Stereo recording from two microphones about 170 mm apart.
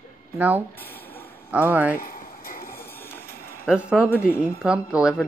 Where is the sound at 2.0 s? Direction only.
60° left (ahead or behind).